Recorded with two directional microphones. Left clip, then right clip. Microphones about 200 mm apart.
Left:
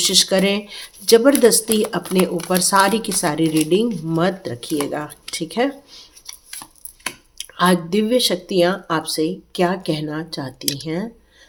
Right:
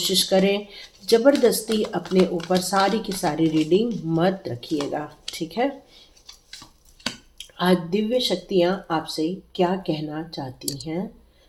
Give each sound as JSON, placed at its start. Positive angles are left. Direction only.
{"t": 0.0, "sound": "speech", "side_deg": 35}
{"t": 2.6, "sound": "speech", "side_deg": 35}
{"t": 7.3, "sound": "speech", "side_deg": 35}